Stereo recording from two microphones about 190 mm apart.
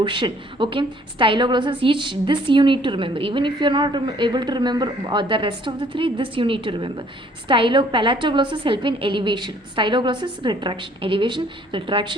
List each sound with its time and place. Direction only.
0.0 s a woman's voice: 25° right (ahead or behind)